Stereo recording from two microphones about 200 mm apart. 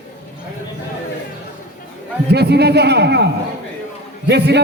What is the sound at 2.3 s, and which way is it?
A man's voice, 55° right (ahead or behind).